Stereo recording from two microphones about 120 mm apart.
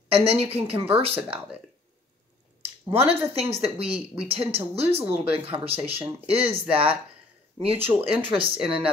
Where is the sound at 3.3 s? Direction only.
55° right (ahead or behind).